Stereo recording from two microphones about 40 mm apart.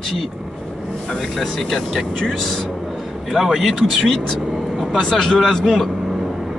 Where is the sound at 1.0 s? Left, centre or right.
Centre.